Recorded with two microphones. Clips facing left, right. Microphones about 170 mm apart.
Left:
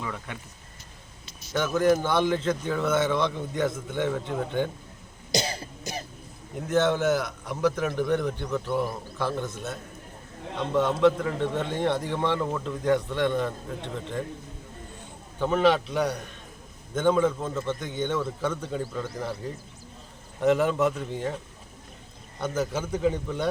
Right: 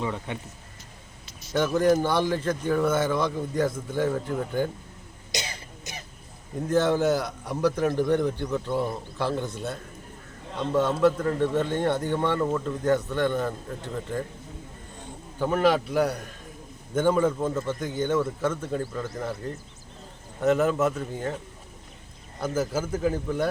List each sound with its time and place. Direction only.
0.0 s speech: 20° right (ahead or behind)
1.5 s a man's voice: 15° right (ahead or behind)
5.3 s cough: 35° left (ahead or behind)
6.7 s a man's voice: 10° right (ahead or behind)
10.8 s a man's voice: 5° right (ahead or behind)
15.4 s a man's voice: 10° right (ahead or behind)
20.4 s speech: centre (ahead or behind)
22.4 s speech: 5° right (ahead or behind)